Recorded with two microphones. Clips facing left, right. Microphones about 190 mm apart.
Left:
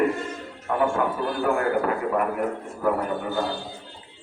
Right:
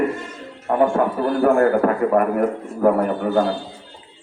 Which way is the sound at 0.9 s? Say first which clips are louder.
Right 6 dB; 45° right (ahead or behind).